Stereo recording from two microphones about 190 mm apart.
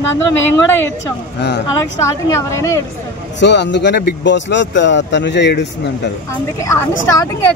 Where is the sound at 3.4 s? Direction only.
65° left (ahead or behind).